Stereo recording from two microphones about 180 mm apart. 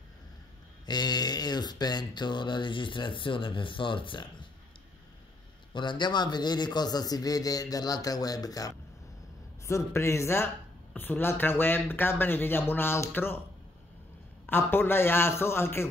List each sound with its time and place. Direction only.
0.8 s speech: 25° left (ahead or behind)
5.7 s speech: 25° left (ahead or behind)
14.4 s speech: 10° left (ahead or behind)